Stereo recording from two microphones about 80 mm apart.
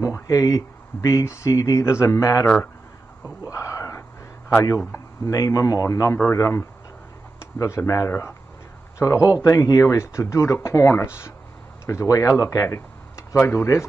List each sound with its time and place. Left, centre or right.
0.0 s speech: left
3.4 s a sound: left
4.6 s a man's voice: left
13.4 s speech: left